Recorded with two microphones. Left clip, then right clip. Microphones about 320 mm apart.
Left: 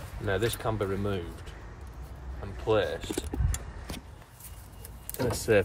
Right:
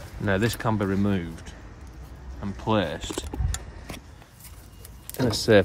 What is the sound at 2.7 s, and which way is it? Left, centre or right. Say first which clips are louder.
Speech: right 1 dB; right.